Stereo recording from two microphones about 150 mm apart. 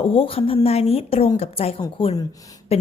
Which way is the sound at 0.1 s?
40° left (ahead or behind).